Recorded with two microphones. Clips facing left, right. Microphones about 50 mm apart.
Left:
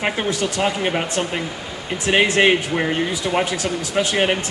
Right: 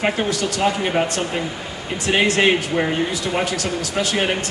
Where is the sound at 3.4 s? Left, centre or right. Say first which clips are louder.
Even; left.